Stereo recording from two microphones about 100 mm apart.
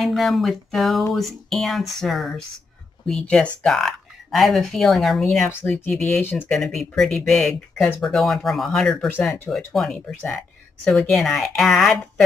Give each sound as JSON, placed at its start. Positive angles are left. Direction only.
{"t": 0.0, "sound": "speech", "side_deg": 0}
{"t": 5.5, "sound": "speech", "side_deg": 20}
{"t": 6.5, "sound": "speech", "side_deg": 5}